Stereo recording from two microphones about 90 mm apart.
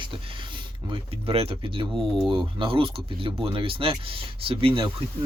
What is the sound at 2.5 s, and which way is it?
Speech, 75° right (ahead or behind).